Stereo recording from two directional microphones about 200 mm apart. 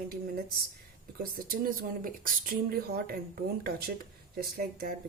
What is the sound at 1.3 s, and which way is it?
Speech, 45° right (ahead or behind).